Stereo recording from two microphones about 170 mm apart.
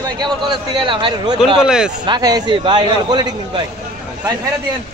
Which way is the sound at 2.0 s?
25° right (ahead or behind).